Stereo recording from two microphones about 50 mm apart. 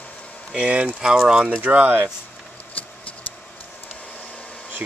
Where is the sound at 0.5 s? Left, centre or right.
Right.